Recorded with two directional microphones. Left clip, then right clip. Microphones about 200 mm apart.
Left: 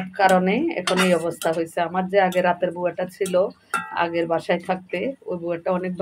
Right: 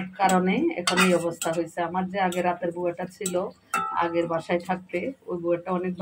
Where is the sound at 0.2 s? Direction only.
55° left (ahead or behind).